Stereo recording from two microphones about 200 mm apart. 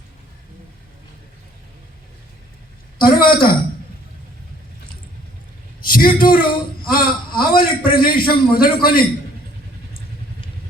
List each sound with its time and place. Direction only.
3.0 s a man's voice: 45° left (ahead or behind)
5.9 s a man's voice: 45° left (ahead or behind)